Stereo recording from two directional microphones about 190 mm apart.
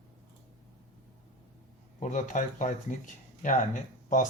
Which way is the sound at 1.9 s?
40° left (ahead or behind).